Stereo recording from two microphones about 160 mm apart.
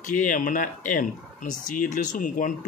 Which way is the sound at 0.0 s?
55° left (ahead or behind).